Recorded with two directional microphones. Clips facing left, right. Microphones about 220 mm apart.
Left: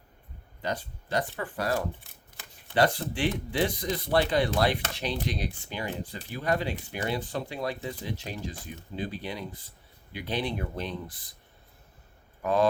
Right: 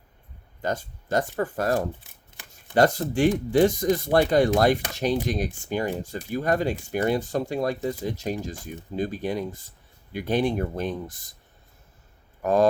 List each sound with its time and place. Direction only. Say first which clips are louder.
0.6 s speech: right 4 dB; 45° right (ahead or behind)
12.4 s speech: right 4 dB; 45° right (ahead or behind)